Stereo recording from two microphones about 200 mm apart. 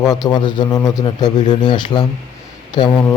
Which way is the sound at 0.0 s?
20° left (ahead or behind).